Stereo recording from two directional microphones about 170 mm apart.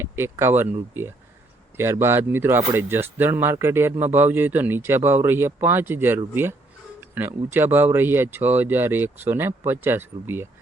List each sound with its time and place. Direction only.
0.0 s speech: 15° right (ahead or behind)